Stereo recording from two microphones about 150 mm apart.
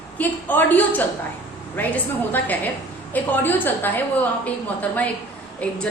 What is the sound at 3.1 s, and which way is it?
A woman's voice, 10° left (ahead or behind).